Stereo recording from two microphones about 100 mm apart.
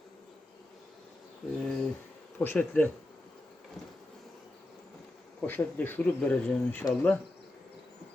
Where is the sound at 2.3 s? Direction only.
15° left (ahead or behind).